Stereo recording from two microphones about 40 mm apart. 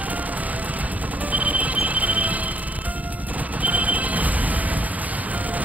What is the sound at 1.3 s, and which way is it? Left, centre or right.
Music, right.